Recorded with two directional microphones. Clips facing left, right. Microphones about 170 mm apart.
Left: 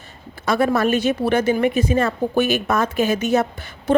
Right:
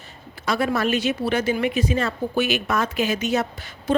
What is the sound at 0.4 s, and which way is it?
A woman's voice, 50° left (ahead or behind).